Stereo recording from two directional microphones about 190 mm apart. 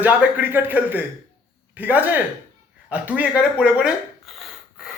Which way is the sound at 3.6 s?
5° right (ahead or behind).